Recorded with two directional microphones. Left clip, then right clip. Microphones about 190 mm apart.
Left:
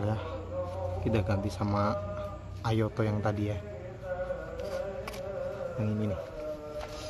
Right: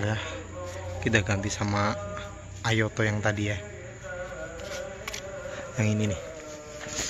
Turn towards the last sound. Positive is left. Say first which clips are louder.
# right 5 dB
turn(degrees=-15)  # may be behind; listen again after turning